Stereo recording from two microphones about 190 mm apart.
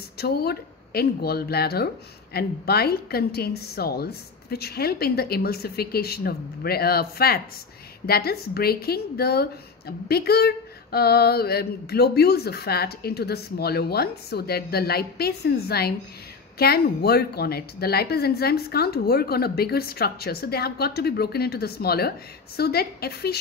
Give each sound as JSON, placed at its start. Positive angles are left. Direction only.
{"t": 0.2, "sound": "a woman's voice", "side_deg": 55}